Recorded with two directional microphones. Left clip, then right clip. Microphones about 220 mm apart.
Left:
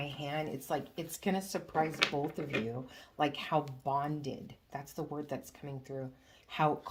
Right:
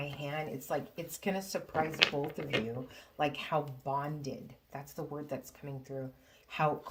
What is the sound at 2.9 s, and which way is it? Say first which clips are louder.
Speech: even; 30° left (ahead or behind).